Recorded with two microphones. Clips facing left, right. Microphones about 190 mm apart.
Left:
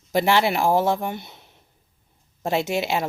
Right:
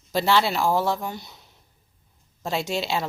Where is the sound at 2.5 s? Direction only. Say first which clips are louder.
Left 3 dB; 20° left (ahead or behind).